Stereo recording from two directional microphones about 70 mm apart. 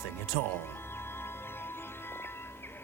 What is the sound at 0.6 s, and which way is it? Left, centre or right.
Music, left.